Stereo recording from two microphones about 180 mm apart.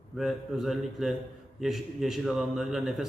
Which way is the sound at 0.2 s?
Centre (ahead or behind).